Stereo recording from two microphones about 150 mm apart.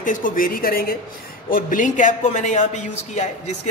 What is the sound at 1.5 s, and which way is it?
Speech, 65° left (ahead or behind).